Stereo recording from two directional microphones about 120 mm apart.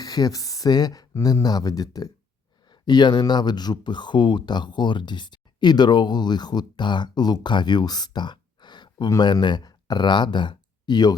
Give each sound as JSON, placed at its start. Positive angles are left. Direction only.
{"t": 0.0, "sound": "speech", "side_deg": 30}